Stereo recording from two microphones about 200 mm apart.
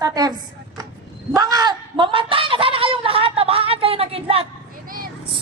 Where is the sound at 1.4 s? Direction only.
20° right (ahead or behind).